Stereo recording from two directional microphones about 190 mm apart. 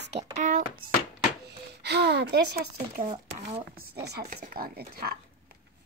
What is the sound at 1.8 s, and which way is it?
Speech, 60° right (ahead or behind).